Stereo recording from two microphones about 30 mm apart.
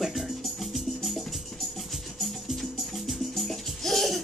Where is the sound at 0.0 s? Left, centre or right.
Centre.